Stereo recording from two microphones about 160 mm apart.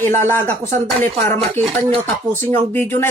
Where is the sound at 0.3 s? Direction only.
15° left (ahead or behind).